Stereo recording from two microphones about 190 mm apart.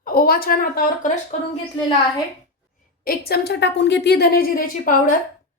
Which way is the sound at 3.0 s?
55° left (ahead or behind).